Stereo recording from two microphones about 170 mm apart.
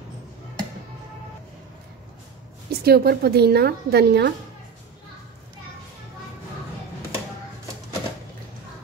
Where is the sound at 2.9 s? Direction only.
65° right (ahead or behind).